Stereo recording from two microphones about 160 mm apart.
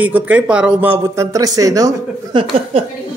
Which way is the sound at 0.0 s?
10° right (ahead or behind).